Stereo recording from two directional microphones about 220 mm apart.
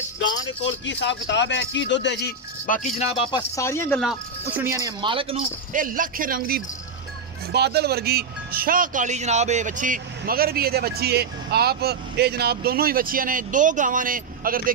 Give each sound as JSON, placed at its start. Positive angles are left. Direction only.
{"t": 0.8, "sound": "speech", "side_deg": 55}
{"t": 2.6, "sound": "speech", "side_deg": 35}
{"t": 4.0, "sound": "speech", "side_deg": -5}
{"t": 5.7, "sound": "speech", "side_deg": -40}